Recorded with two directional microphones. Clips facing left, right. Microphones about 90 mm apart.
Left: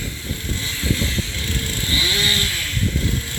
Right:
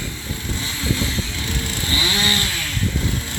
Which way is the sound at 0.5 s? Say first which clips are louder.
Even; 20° right (ahead or behind).